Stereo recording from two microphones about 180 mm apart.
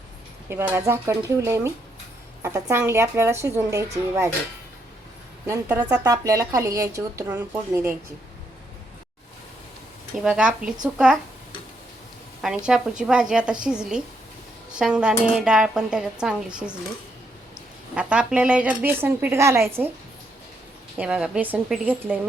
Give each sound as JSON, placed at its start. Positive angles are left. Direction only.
{"t": 0.5, "sound": "speech", "side_deg": -10}
{"t": 5.5, "sound": "speech", "side_deg": -10}
{"t": 10.2, "sound": "speech", "side_deg": -5}
{"t": 12.4, "sound": "speech", "side_deg": -5}
{"t": 17.9, "sound": "speech", "side_deg": -5}
{"t": 21.0, "sound": "speech", "side_deg": -5}